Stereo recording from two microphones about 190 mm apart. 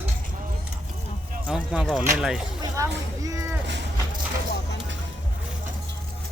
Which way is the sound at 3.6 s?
65° right (ahead or behind).